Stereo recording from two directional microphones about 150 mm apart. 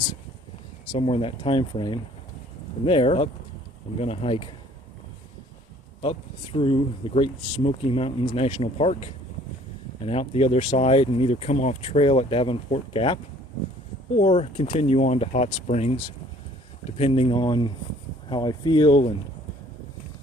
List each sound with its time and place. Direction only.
0.9 s speech: 40° left (ahead or behind)
6.0 s speech: 40° left (ahead or behind)
14.2 s speech: 45° left (ahead or behind)
17.0 s speech: 40° left (ahead or behind)